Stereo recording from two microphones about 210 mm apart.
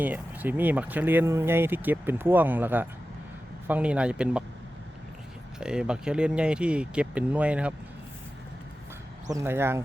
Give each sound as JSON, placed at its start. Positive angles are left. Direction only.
{"t": 0.0, "sound": "speech", "side_deg": -10}
{"t": 5.5, "sound": "speech", "side_deg": -5}
{"t": 9.3, "sound": "speech", "side_deg": -10}